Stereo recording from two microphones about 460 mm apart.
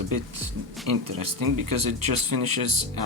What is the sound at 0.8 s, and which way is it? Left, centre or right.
Speech, right.